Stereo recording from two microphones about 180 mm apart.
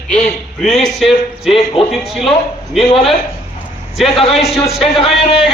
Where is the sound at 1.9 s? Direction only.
Centre (ahead or behind).